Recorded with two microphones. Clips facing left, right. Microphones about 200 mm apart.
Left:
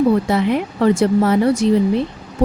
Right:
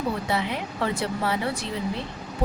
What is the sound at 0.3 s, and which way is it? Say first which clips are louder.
A woman's voice: left 10 dB; 50° left (ahead or behind).